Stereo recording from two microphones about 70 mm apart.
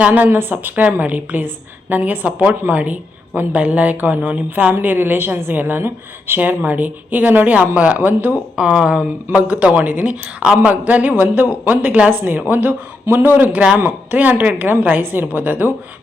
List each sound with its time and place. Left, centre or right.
0.0 s a woman's voice: right
8.5 s a woman's voice: centre